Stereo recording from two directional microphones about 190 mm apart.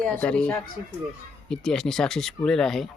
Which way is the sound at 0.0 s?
10° left (ahead or behind).